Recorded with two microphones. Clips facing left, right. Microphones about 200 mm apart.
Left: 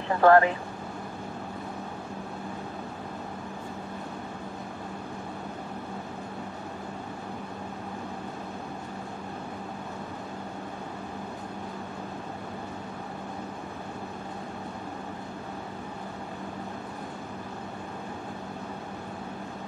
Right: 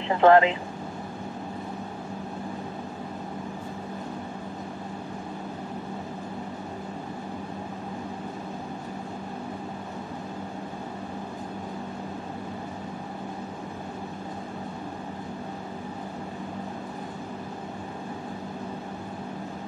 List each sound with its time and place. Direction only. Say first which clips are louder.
0.1 s speech: right 1 dB; 20° right (ahead or behind)